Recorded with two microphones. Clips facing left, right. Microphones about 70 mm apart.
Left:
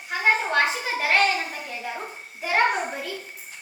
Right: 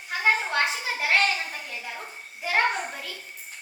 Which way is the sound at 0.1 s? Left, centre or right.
Centre.